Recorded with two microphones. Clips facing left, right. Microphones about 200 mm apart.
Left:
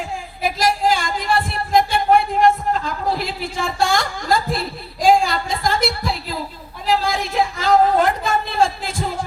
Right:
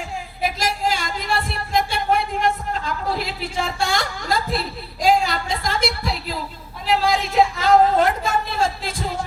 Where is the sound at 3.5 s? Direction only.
50° left (ahead or behind).